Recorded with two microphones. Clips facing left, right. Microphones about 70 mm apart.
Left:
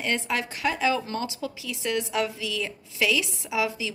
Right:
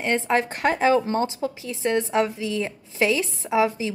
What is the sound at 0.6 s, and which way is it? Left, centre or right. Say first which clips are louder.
A woman's voice: right 4 dB; right.